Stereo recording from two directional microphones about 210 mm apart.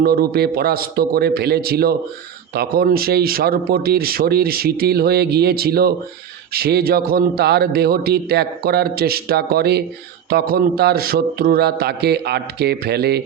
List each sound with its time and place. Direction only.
0.0 s speech: 45° right (ahead or behind)